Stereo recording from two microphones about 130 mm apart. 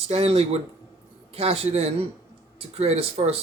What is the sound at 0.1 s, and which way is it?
Speech, 50° right (ahead or behind).